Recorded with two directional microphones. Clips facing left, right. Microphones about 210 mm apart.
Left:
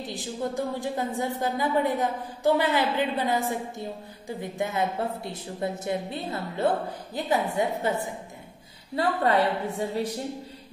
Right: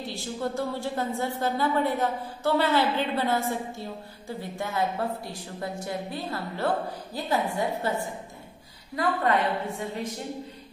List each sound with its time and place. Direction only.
0.0 s a woman's voice: 15° left (ahead or behind)
8.9 s a woman's voice: 35° left (ahead or behind)